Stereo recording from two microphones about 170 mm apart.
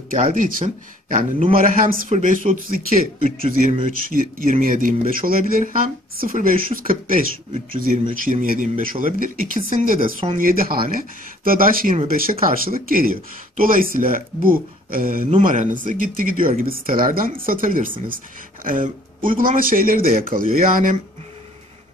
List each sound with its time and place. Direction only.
0.1 s speech: 50° right (ahead or behind)